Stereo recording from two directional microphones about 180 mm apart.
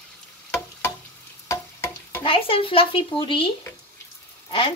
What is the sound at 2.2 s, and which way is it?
Speech, 30° left (ahead or behind).